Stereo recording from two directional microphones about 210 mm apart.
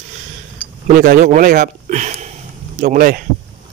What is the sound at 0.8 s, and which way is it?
Speech, 40° right (ahead or behind).